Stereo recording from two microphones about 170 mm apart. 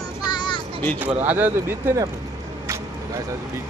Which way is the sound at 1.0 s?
10° right (ahead or behind).